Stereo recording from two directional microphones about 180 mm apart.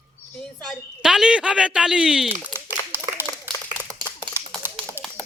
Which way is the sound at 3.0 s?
10° right (ahead or behind).